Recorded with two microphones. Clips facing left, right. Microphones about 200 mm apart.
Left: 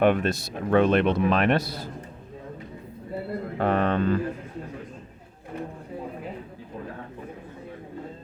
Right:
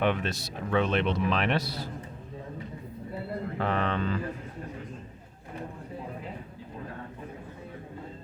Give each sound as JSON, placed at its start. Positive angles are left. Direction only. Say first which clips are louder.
{"t": 0.0, "sound": "speech", "louder": "left 7 dB", "side_deg": 50}
{"t": 3.6, "sound": "speech", "louder": "left 6 dB", "side_deg": 50}